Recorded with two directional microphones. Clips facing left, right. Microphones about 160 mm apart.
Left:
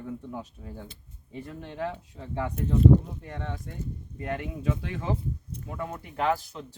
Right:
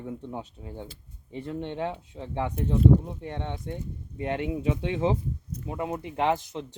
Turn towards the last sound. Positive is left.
turn(degrees=-20)  # may be behind; listen again after turning